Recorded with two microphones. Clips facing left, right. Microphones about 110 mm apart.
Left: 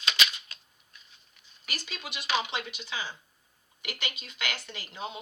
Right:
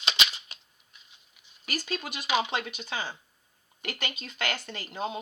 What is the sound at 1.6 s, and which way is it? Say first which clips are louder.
Speech: right 7 dB; 45° right (ahead or behind).